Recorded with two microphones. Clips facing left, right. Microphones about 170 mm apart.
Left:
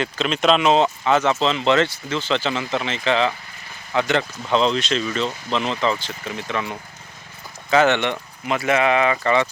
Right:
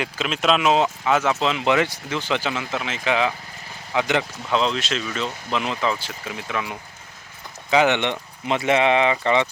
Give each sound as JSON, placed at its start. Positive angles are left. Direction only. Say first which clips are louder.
{"t": 0.0, "sound": "speech", "louder": "left 3 dB", "side_deg": -5}
{"t": 4.4, "sound": "speech", "louder": "left 5 dB", "side_deg": 0}